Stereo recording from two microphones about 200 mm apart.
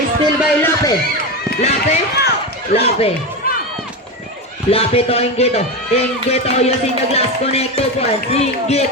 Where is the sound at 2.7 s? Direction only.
30° left (ahead or behind).